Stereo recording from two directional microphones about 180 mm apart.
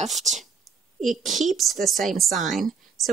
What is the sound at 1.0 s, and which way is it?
Speech, centre (ahead or behind).